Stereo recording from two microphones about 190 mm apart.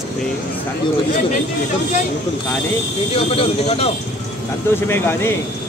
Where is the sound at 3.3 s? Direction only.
30° left (ahead or behind).